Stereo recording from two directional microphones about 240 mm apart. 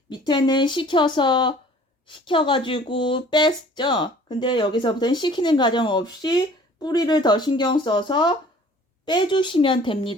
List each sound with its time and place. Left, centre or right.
0.1 s speech: centre